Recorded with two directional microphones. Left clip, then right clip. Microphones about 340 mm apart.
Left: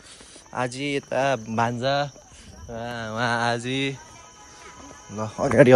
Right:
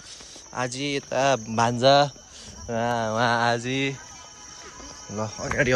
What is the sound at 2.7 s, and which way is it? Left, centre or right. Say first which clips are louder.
Speech: right 7 dB; right.